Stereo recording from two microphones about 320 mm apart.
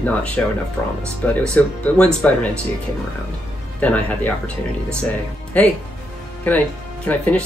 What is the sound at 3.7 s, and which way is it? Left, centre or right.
Speech, centre.